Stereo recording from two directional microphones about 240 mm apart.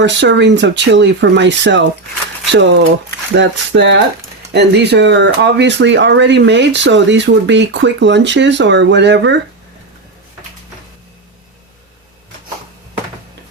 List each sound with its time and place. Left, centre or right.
0.0 s speech: right